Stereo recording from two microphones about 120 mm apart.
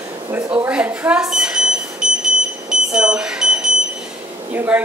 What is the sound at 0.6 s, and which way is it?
Smoke detector, 15° right (ahead or behind).